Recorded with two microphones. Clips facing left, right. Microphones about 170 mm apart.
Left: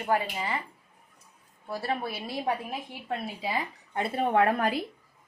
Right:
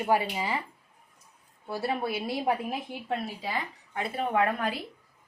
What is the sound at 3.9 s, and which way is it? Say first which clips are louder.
Speech: left 3 dB; 40° left (ahead or behind).